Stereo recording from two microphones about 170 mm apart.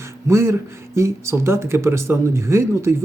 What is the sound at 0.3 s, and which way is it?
Speech, 15° right (ahead or behind).